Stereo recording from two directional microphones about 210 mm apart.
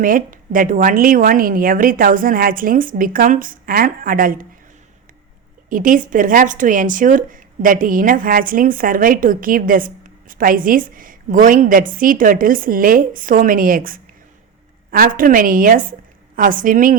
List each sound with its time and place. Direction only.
0.0 s speech: 40° right (ahead or behind)
5.6 s a woman's voice: 40° right (ahead or behind)